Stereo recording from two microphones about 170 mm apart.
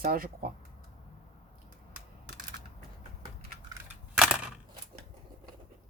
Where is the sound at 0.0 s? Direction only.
60° right (ahead or behind).